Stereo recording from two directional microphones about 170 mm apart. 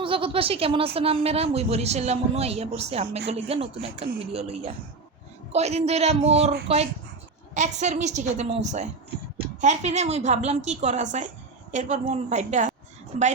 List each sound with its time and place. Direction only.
0.0 s a man's voice: 30° right (ahead or behind)